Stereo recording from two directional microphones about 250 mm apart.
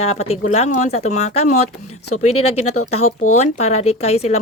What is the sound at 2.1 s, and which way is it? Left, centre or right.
Speech, left.